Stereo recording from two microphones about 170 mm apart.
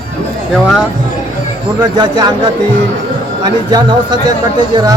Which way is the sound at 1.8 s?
25° right (ahead or behind).